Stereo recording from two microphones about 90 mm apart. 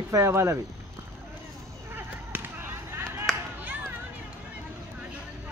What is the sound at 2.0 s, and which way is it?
Chop, 25° right (ahead or behind).